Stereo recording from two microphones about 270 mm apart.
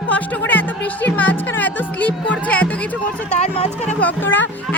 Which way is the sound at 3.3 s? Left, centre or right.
Left.